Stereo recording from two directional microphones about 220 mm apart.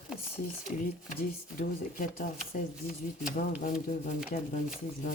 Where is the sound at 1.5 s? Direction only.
40° left (ahead or behind).